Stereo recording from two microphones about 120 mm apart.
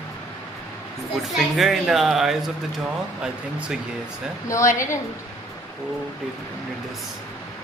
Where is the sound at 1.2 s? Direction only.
Centre (ahead or behind).